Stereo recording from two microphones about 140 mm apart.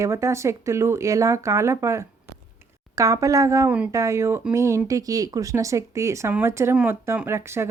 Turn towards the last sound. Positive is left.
turn(degrees=-20)  # may be behind; listen again after turning